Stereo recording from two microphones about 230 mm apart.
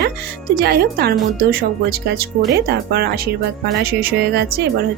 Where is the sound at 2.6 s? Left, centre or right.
Right.